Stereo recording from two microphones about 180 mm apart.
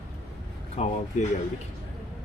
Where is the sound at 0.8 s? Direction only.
35° left (ahead or behind).